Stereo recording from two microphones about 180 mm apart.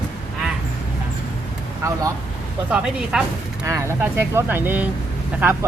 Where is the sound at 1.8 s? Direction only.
15° right (ahead or behind).